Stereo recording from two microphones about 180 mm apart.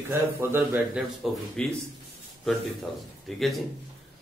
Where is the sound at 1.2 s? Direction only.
Centre (ahead or behind).